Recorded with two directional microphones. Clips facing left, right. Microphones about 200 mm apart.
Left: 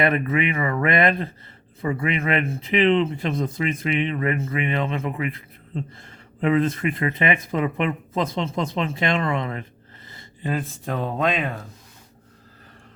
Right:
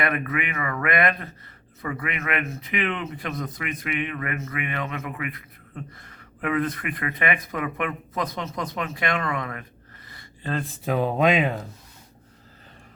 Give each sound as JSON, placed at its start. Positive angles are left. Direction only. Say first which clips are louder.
{"t": 0.0, "sound": "speech", "louder": "left 5 dB", "side_deg": 25}
{"t": 10.1, "sound": "a sound", "louder": "left 5 dB", "side_deg": 25}
{"t": 10.8, "sound": "speech", "louder": "right 4 dB", "side_deg": -10}